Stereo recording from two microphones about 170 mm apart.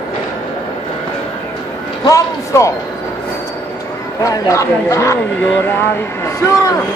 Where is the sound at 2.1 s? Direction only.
20° left (ahead or behind).